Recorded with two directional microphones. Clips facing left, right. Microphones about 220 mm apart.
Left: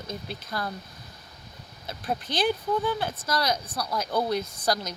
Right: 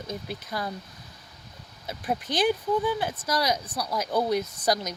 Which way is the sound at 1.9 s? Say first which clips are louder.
Right 2 dB; 15° right (ahead or behind).